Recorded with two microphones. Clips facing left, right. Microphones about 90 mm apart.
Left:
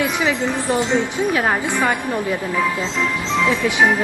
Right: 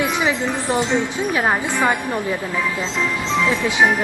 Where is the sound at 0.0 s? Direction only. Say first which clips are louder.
Even; 20° right (ahead or behind).